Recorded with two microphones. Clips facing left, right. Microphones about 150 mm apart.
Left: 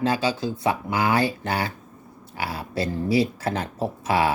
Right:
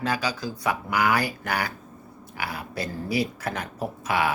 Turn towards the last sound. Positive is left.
turn(degrees=30)  # may be behind; listen again after turning